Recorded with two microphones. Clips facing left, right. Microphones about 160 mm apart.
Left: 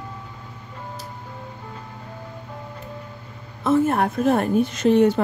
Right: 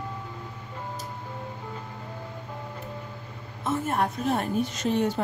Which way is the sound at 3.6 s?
65° left (ahead or behind).